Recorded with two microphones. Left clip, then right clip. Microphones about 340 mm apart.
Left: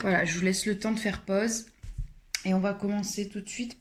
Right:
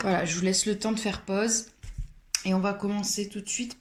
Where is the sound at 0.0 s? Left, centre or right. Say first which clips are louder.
Even; left.